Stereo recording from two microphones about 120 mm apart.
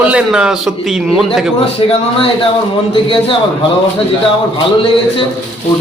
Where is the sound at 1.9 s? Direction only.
50° left (ahead or behind).